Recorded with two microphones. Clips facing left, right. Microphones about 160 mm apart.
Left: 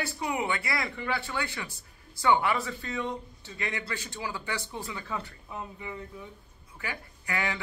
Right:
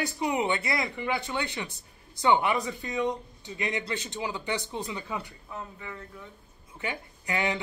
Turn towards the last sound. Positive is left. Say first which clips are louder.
# right 3 dB
turn(degrees=-20)  # may be behind; listen again after turning